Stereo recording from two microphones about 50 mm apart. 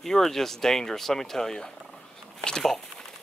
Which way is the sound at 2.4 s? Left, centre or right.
Centre.